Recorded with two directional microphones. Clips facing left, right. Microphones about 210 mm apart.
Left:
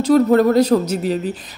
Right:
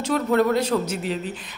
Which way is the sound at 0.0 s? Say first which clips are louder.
Left 8 dB; 40° left (ahead or behind).